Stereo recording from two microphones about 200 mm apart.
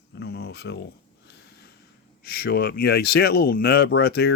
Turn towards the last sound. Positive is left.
turn(degrees=50)  # may be behind; listen again after turning